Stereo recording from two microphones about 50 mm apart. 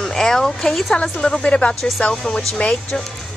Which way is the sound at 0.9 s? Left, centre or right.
Centre.